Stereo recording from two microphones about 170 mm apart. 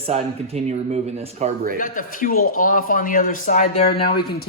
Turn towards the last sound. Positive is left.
turn(degrees=35)  # may be behind; listen again after turning